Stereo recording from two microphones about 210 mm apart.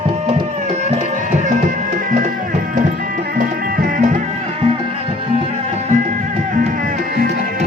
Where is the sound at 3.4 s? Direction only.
40° right (ahead or behind).